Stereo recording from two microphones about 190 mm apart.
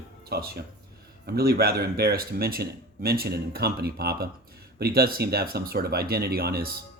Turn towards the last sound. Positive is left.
turn(degrees=-55)  # may be behind; listen again after turning